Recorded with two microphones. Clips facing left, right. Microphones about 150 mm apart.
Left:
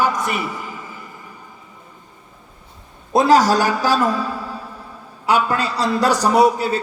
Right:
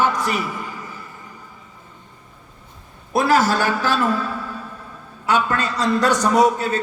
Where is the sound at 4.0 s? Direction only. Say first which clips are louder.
Left 1 dB; 15° left (ahead or behind).